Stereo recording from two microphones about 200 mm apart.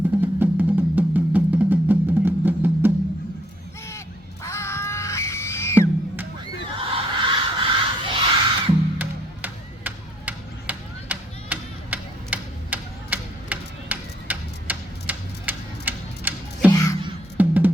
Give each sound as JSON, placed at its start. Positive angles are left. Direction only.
{"t": 0.2, "sound": "music", "side_deg": -10}
{"t": 4.4, "sound": "music", "side_deg": 15}
{"t": 6.7, "sound": "a sound", "side_deg": -25}
{"t": 9.0, "sound": "music", "side_deg": -10}